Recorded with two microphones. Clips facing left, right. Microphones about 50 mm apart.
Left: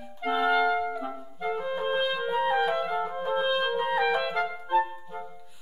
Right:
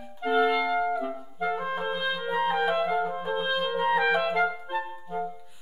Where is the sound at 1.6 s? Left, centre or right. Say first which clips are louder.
Even; right.